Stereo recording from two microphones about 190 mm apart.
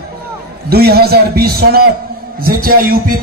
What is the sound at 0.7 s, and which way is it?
A man's voice, 55° right (ahead or behind).